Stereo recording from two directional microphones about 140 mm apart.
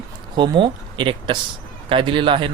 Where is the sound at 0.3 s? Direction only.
35° right (ahead or behind).